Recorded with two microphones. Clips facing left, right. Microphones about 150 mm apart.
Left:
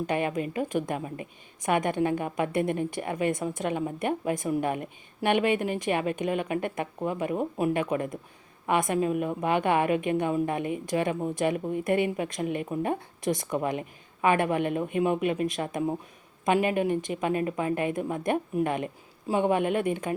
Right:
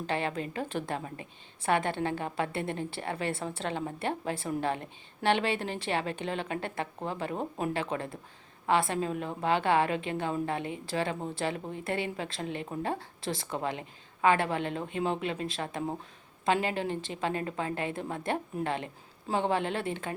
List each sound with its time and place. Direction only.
0.1 s a woman's voice: 15° left (ahead or behind)